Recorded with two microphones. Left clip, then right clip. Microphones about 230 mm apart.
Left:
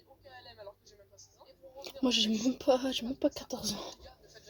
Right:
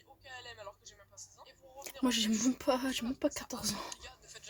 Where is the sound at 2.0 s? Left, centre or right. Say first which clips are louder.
Left 3 dB; right.